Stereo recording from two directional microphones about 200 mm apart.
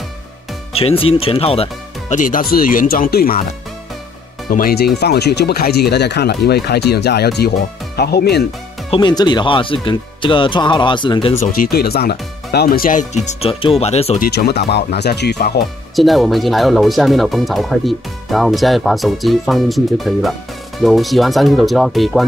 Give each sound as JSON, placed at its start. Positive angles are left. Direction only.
{"t": 0.7, "sound": "speech", "side_deg": 30}
{"t": 4.5, "sound": "speech", "side_deg": 45}
{"t": 8.9, "sound": "speech", "side_deg": 20}
{"t": 11.5, "sound": "speech", "side_deg": 50}
{"t": 14.2, "sound": "speech", "side_deg": 50}
{"t": 16.0, "sound": "speech", "side_deg": 0}